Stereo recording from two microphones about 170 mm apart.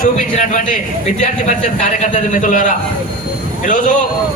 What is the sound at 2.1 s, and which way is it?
A man's voice, 50° left (ahead or behind).